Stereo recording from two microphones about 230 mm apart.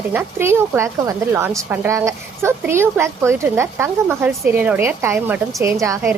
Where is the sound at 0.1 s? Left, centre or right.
Centre.